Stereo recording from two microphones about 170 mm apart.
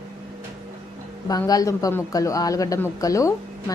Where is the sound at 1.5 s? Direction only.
20° left (ahead or behind).